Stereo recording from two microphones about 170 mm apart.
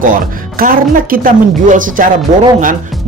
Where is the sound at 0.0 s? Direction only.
55° right (ahead or behind).